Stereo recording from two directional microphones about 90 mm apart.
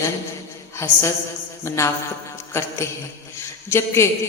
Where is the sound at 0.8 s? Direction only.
30° left (ahead or behind).